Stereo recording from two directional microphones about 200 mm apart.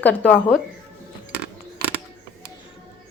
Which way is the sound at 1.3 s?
55° right (ahead or behind).